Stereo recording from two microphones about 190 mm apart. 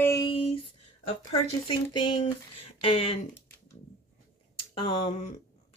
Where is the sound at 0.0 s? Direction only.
15° left (ahead or behind).